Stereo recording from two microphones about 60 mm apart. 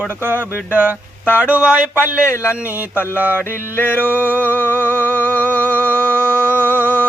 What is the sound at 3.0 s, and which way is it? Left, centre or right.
Speech, right.